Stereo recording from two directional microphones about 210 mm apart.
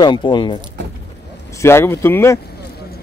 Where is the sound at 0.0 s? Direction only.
20° left (ahead or behind).